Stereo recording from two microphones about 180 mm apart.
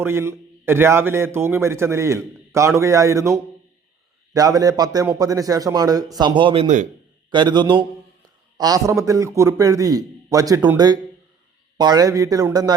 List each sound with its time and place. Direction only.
0.0 s a man's voice: 15° right (ahead or behind); by 6.8 s 40° right (ahead or behind)
7.3 s a man's voice: 25° right (ahead or behind)